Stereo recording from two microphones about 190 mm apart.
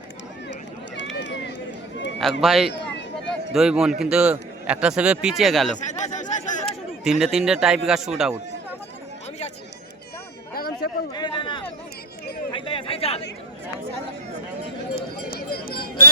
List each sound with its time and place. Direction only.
1.2 s run: 65° left (ahead or behind)
2.4 s speech: centre (ahead or behind)
5.8 s chatter: 40° left (ahead or behind)
6.7 s speech: centre (ahead or behind)
10.5 s chatter: 55° left (ahead or behind)
11.1 s a sound: 25° left (ahead or behind)
12.5 s chatter: 25° left (ahead or behind)
14.9 s a sound: 55° left (ahead or behind)